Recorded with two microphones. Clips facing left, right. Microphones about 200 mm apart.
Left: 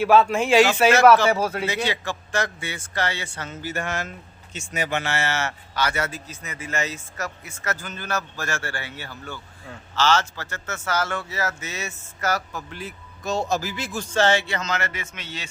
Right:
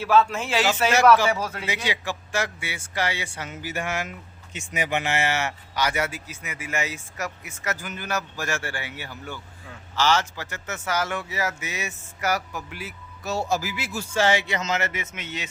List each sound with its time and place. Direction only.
0.0 s speech: 15° left (ahead or behind)
1.3 s speech: 40° left (ahead or behind)
1.6 s a man's voice: 10° right (ahead or behind)